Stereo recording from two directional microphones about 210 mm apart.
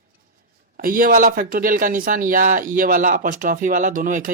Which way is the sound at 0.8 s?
40° right (ahead or behind).